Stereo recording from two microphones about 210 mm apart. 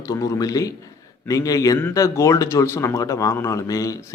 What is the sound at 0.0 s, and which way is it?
Speech, 15° left (ahead or behind).